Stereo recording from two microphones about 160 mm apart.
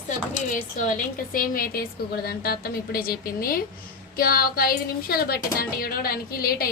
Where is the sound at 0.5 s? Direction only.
50° left (ahead or behind).